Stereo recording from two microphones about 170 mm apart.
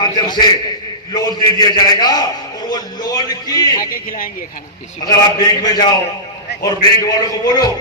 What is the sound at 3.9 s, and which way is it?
Speech, 55° left (ahead or behind).